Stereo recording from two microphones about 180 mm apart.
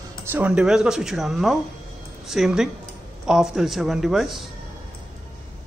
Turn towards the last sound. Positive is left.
turn(degrees=0)  # may be behind; listen again after turning